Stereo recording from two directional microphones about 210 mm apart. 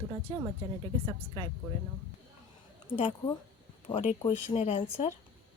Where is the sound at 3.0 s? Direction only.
30° left (ahead or behind).